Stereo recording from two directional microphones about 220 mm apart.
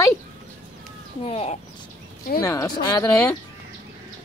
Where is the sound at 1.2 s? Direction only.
25° left (ahead or behind).